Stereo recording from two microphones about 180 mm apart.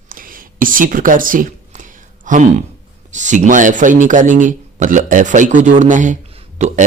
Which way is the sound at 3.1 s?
45° right (ahead or behind).